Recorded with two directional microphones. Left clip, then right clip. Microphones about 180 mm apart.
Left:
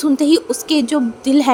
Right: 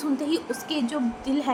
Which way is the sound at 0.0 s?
55° left (ahead or behind).